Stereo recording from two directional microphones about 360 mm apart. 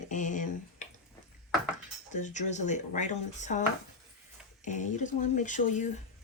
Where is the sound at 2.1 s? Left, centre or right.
Centre.